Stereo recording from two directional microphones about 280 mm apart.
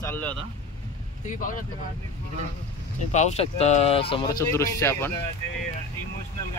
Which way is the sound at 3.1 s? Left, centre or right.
Left.